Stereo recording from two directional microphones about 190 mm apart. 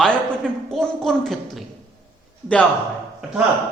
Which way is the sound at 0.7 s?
Centre (ahead or behind).